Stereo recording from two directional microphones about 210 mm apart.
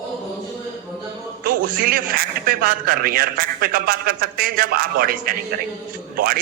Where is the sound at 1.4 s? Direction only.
40° right (ahead or behind).